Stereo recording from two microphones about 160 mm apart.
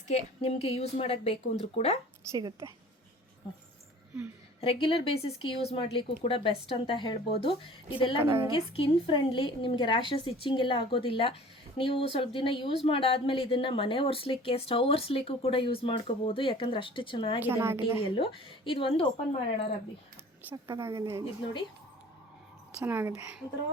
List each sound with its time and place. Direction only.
0.1 s speech: 40° left (ahead or behind)
2.3 s a woman's voice: 20° right (ahead or behind)
4.6 s speech: 35° left (ahead or behind)
17.4 s a woman's voice: 15° right (ahead or behind)
18.0 s speech: 35° left (ahead or behind)
20.5 s a woman's voice: 15° right (ahead or behind)
22.8 s a woman's voice: 15° right (ahead or behind)